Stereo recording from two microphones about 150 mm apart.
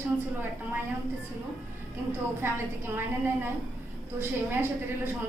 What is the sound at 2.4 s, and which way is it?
A woman's voice, 15° right (ahead or behind).